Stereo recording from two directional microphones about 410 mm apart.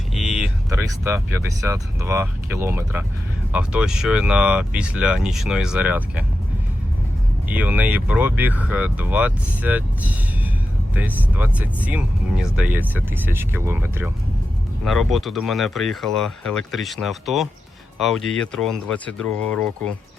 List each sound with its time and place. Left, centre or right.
0.1 s speech: centre
7.4 s speech: centre